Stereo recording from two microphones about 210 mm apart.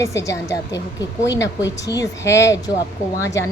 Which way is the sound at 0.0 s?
15° left (ahead or behind).